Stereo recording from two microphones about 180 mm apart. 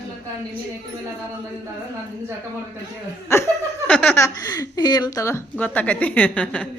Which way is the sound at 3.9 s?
5° left (ahead or behind).